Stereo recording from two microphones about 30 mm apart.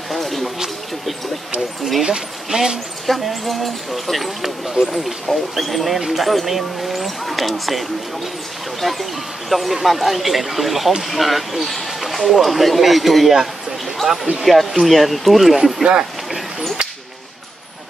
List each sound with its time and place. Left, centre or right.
0.1 s a sound: centre
2.0 s speech: centre
3.1 s speech: centre
8.8 s speech: centre
14.4 s speech: centre
15.8 s speech: right
16.3 s a sound: centre